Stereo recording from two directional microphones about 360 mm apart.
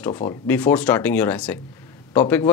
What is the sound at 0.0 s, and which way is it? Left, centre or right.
Speech, centre.